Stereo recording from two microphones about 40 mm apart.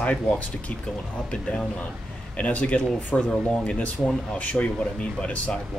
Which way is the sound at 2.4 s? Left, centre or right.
Left.